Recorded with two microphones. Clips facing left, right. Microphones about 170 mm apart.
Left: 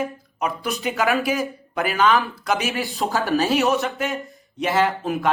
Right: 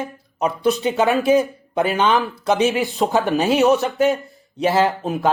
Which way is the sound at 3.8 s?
35° right (ahead or behind).